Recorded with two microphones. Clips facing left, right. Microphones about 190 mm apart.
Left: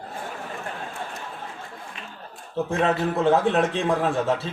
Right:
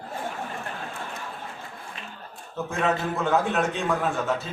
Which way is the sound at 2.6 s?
35° left (ahead or behind).